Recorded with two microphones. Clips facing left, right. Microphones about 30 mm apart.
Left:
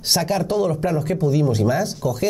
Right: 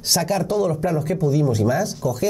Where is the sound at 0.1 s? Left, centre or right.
Centre.